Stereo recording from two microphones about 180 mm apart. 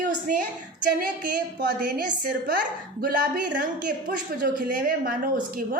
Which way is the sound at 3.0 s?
50° right (ahead or behind).